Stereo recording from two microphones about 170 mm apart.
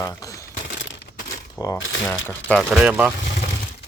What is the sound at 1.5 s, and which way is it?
Speech, 20° left (ahead or behind).